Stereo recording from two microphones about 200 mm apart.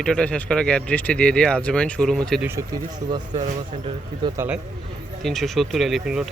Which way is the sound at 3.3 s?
35° right (ahead or behind).